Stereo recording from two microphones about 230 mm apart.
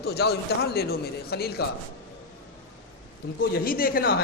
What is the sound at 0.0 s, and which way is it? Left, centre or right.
A man's voice, left.